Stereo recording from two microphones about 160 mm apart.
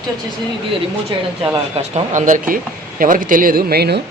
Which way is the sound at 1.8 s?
45° right (ahead or behind).